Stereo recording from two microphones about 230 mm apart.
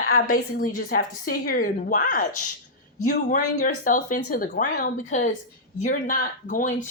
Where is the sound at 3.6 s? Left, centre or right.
Left.